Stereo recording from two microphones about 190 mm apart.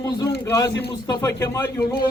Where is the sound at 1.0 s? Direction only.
20° left (ahead or behind).